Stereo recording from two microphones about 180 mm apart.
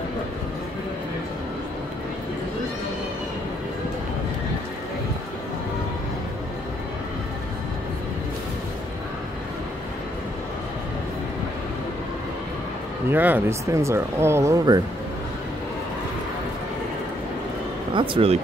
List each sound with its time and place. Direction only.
13.1 s speech: 10° right (ahead or behind)
17.9 s speech: 30° right (ahead or behind)